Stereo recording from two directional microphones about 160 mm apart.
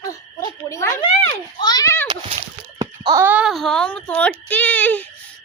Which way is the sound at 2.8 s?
20° right (ahead or behind).